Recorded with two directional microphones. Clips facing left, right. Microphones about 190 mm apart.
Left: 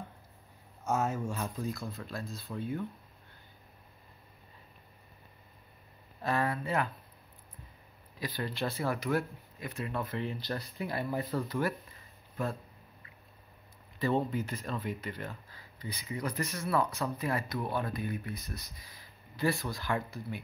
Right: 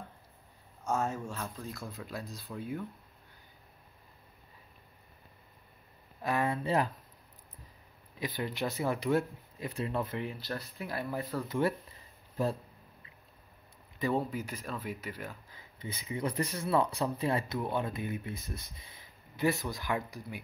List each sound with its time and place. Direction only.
0.8 s speech: 5° left (ahead or behind)
1.8 s speech: 5° right (ahead or behind)
2.5 s speech: centre (ahead or behind)
6.2 s speech: 20° right (ahead or behind)
8.2 s speech: 20° right (ahead or behind)
9.0 s speech: 30° right (ahead or behind)
10.0 s speech: 10° right (ahead or behind)
11.4 s speech: 25° right (ahead or behind)
14.1 s speech: 5° right (ahead or behind)
15.5 s speech: 25° right (ahead or behind)